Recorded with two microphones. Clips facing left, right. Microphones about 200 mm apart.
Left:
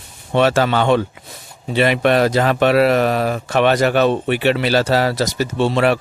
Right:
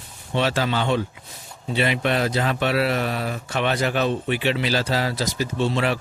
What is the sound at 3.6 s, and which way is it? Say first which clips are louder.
Speech: left 8 dB; 70° left (ahead or behind).